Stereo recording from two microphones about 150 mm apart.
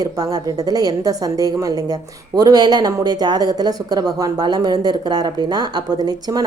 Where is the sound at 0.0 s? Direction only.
25° right (ahead or behind).